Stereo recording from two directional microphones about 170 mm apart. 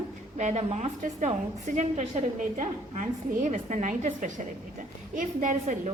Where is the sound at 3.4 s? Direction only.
45° right (ahead or behind).